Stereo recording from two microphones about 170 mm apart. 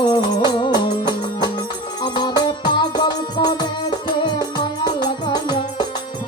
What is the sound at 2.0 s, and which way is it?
Music, 25° left (ahead or behind).